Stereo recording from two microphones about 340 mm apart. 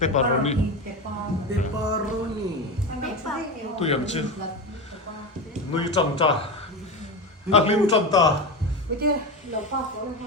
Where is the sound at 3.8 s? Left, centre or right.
Centre.